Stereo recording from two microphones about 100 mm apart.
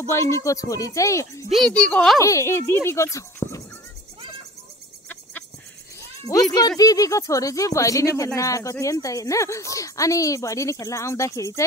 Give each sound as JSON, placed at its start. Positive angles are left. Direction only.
{"t": 0.1, "sound": "speech", "side_deg": 30}
{"t": 1.5, "sound": "a child's voice", "side_deg": 5}
{"t": 2.1, "sound": "speech", "side_deg": 30}
{"t": 6.2, "sound": "speech", "side_deg": 40}